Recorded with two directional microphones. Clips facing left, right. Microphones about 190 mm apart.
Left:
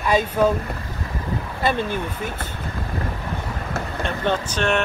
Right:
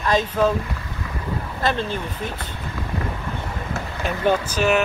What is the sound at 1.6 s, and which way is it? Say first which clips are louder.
Speech: left 1 dB; 10° left (ahead or behind).